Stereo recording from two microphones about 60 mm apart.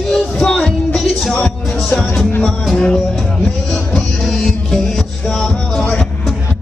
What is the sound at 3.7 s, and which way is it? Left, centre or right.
Music, centre.